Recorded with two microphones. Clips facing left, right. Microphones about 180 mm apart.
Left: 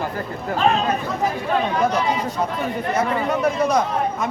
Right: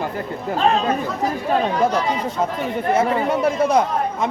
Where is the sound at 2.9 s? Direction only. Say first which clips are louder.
Right 4 dB; 25° right (ahead or behind).